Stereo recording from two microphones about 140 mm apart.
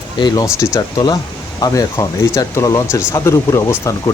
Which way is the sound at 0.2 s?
30° left (ahead or behind).